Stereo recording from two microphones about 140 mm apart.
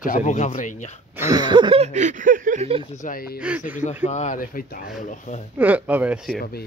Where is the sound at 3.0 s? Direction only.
75° left (ahead or behind).